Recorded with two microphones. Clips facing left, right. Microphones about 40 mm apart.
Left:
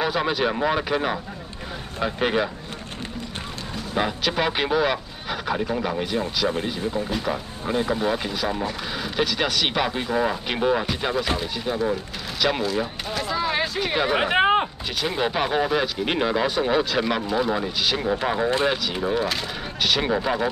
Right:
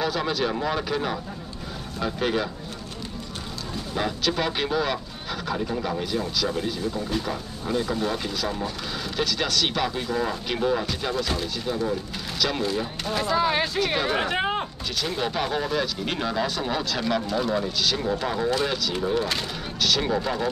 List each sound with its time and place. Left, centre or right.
0.0 s speech: left
3.9 s speech: left
7.1 s speech: centre
13.1 s speech: centre
13.7 s speech: centre